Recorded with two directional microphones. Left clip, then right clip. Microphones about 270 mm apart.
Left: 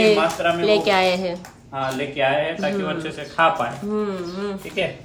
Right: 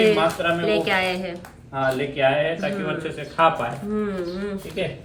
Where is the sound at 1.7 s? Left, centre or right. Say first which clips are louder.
Right 1 dB; centre.